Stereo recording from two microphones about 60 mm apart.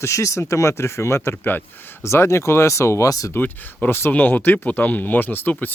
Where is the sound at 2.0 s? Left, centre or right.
Left.